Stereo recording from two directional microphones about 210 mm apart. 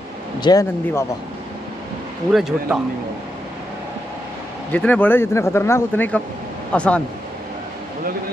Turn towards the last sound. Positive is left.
turn(degrees=5)  # may be behind; listen again after turning